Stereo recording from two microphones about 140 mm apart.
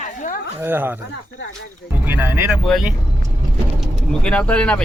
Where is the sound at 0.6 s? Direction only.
15° right (ahead or behind).